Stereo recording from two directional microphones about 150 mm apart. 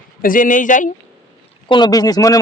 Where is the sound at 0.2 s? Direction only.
65° left (ahead or behind).